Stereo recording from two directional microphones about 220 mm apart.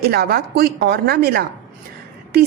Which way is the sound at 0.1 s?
45° right (ahead or behind).